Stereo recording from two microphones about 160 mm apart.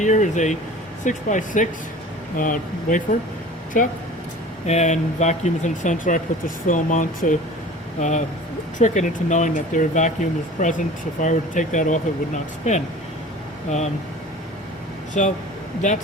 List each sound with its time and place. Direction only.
0.0 s speech: 50° left (ahead or behind)
15.2 s speech: 45° left (ahead or behind)